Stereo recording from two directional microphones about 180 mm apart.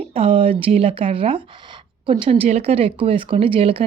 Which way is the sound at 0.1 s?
30° right (ahead or behind).